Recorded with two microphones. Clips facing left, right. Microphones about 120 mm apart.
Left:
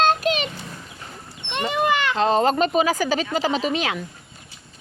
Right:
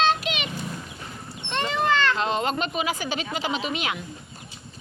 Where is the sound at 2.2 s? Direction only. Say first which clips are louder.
Left 7 dB; 35° left (ahead or behind).